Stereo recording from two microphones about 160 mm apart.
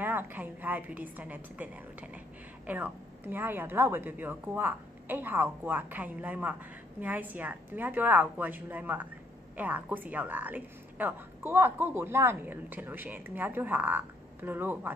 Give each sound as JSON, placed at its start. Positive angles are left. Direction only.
{"t": 0.0, "sound": "a woman's voice", "side_deg": -10}